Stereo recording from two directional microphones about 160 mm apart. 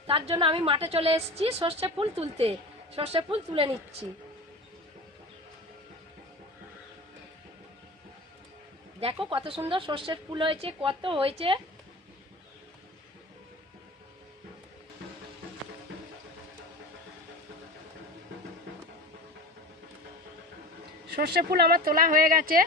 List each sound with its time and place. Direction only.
0.1 s a woman's voice: 35° right (ahead or behind)
9.0 s a woman's voice: 35° right (ahead or behind)
21.1 s speech: 90° right; by 22.6 s 60° right (ahead or behind)